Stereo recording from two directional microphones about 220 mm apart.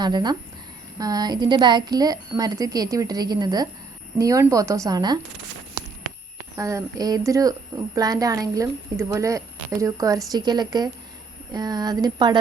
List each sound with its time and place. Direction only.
0.0 s speech: 20° right (ahead or behind)
6.6 s speech: 15° right (ahead or behind)